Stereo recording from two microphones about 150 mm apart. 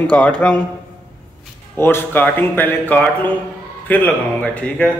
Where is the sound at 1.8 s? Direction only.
15° left (ahead or behind).